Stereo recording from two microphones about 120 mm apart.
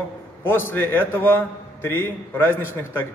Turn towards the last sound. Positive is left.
turn(degrees=15)  # may be behind; listen again after turning